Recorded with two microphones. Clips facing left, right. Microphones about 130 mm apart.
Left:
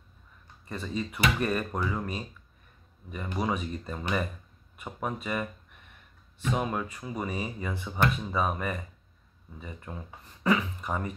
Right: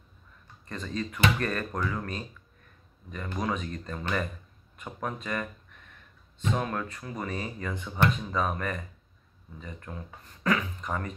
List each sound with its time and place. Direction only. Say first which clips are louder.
0.7 s speech: even; 10° left (ahead or behind)
6.5 s speech: left 1 dB; 10° left (ahead or behind)